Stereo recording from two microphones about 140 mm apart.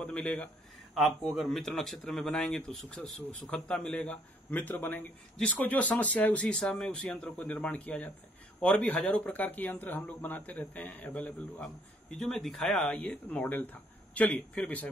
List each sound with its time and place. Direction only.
0.0 s speech: 10° left (ahead or behind)